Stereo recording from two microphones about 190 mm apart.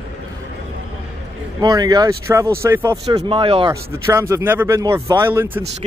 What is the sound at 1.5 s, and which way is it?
Speech, 20° right (ahead or behind).